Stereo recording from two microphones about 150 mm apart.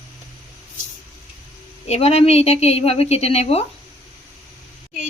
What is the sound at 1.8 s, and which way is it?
Speech, 45° left (ahead or behind).